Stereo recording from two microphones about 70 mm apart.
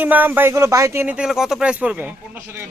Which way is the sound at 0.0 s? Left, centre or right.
Right.